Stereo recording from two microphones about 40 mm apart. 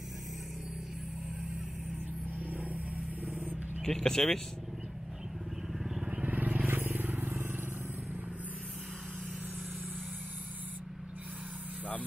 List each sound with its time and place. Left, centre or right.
2.3 s vehicle: right
3.8 s speech: centre
6.2 s vehicle: right